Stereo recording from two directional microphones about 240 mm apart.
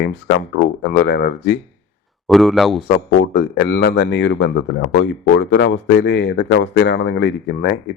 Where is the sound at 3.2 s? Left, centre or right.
Left.